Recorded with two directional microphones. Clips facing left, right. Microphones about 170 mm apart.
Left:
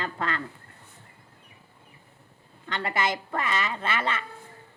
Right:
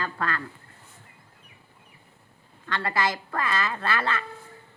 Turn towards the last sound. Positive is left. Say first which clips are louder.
# right 1 dB
turn(degrees=20)  # may be behind; listen again after turning